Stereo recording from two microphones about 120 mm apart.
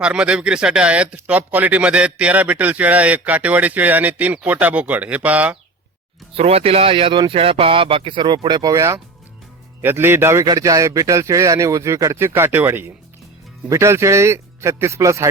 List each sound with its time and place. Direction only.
0.0 s speech: 10° right (ahead or behind)
6.3 s speech: 55° right (ahead or behind); by 10.4 s 20° right (ahead or behind)
10.4 s speech: 30° right (ahead or behind)